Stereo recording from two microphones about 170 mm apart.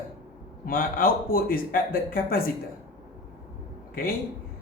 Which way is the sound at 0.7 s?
55° left (ahead or behind).